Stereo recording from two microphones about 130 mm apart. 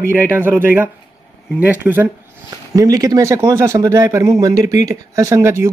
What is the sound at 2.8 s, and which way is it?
A man's voice, 30° right (ahead or behind).